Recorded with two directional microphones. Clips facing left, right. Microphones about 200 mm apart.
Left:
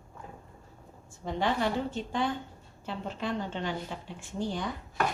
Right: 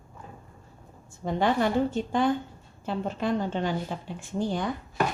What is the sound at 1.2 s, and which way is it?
Speech, 45° right (ahead or behind).